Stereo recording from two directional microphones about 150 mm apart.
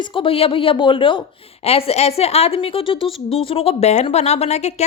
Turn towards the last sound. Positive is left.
turn(degrees=45)  # may be behind; listen again after turning